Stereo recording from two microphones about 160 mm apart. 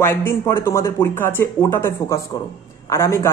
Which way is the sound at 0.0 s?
15° left (ahead or behind).